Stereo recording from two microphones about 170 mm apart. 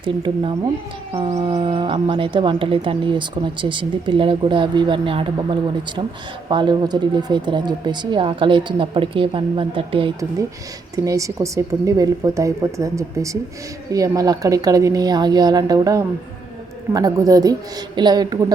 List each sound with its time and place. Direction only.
0.0 s speech: 30° right (ahead or behind)
1.1 s a sound: 40° right (ahead or behind)
1.4 s speech: 30° right (ahead or behind)
10.9 s speech: 20° right (ahead or behind)